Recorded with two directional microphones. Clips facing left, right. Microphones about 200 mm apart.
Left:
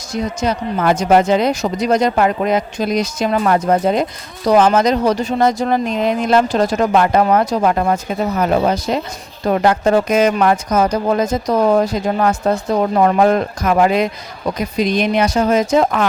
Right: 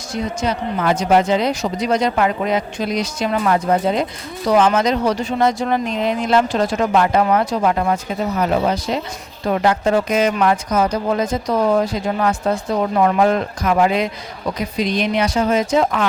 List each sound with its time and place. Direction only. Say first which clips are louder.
0.1 s speech: left 2 dB; 45° left (ahead or behind)